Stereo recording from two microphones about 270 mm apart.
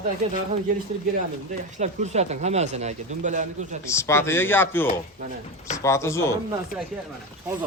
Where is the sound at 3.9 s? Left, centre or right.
Centre.